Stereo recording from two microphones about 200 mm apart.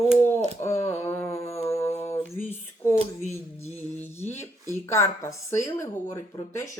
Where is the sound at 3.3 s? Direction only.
30° left (ahead or behind).